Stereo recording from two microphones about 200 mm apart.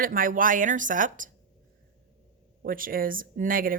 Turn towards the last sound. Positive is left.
turn(degrees=-45)  # may be behind; listen again after turning